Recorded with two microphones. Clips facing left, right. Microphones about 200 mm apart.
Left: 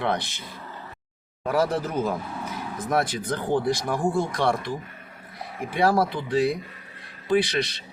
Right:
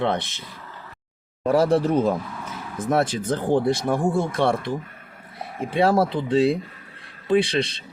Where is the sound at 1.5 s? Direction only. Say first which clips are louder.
Right 6 dB; 30° right (ahead or behind).